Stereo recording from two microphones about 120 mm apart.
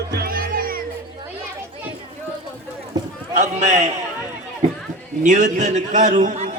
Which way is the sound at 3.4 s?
70° right (ahead or behind).